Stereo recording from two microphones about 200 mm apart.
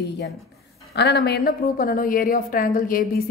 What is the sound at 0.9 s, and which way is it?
A woman's voice, 55° left (ahead or behind).